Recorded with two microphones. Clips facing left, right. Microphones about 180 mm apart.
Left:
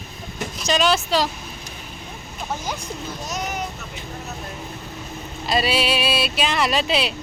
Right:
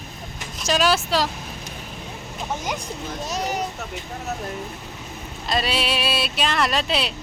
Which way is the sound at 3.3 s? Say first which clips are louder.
Right 3 dB; 35° right (ahead or behind).